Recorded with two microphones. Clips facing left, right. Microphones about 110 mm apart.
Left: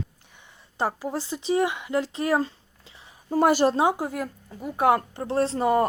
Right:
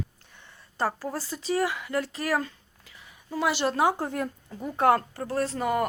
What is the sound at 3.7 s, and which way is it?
Speech, 20° left (ahead or behind).